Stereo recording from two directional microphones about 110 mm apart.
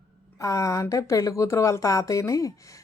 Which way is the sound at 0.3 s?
30° left (ahead or behind).